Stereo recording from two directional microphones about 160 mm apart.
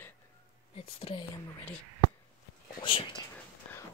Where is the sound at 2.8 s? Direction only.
30° left (ahead or behind).